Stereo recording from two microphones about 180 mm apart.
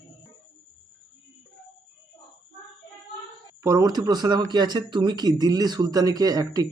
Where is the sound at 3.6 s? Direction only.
20° right (ahead or behind).